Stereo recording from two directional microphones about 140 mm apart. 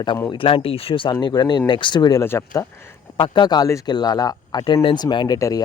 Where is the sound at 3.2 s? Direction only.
30° left (ahead or behind).